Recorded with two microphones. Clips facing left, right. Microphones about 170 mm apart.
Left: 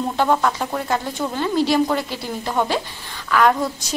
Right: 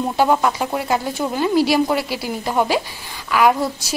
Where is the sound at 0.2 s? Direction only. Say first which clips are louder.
Right 2 dB; 10° right (ahead or behind).